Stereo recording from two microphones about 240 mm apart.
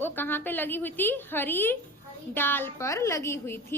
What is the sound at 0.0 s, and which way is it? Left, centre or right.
A woman's voice, centre.